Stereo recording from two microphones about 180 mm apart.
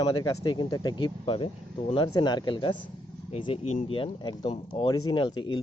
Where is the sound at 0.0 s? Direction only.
20° left (ahead or behind).